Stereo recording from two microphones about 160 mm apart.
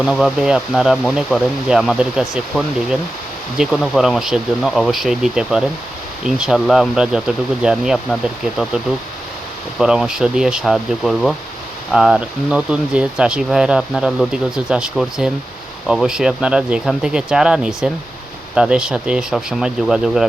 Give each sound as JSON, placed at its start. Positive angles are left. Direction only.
{"t": 0.0, "sound": "speech", "side_deg": -5}